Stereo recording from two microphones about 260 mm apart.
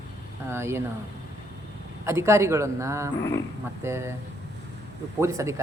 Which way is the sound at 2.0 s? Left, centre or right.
Centre.